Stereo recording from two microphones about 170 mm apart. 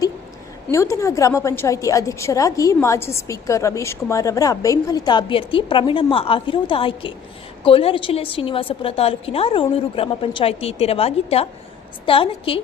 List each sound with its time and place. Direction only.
0.7 s a woman's voice: 15° left (ahead or behind)